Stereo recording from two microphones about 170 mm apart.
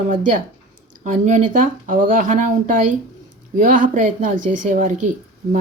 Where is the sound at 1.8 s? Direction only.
50° right (ahead or behind).